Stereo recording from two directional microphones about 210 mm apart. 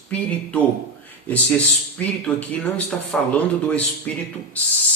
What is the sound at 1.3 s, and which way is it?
Speech, 5° left (ahead or behind).